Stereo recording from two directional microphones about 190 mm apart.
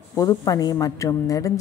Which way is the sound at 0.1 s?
20° left (ahead or behind).